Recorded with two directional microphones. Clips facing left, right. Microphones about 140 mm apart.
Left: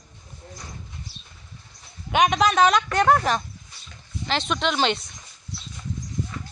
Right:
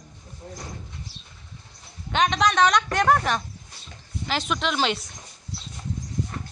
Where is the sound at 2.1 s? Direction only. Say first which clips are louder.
Left 2 dB; 10° left (ahead or behind).